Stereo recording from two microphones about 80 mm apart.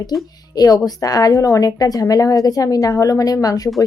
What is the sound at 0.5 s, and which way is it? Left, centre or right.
A woman's voice, left.